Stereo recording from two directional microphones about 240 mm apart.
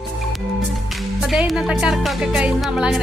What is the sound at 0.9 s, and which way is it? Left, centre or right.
Music, centre.